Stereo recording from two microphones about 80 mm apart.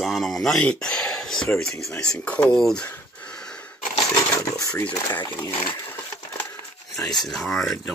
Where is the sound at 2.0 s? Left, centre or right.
Centre.